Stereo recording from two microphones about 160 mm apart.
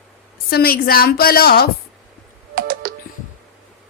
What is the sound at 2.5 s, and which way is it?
Music, 65° right (ahead or behind).